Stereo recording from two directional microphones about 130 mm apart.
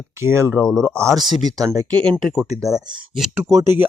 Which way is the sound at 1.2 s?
35° right (ahead or behind).